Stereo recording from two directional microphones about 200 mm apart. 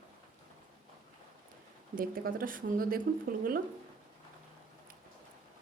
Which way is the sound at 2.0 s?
45° right (ahead or behind).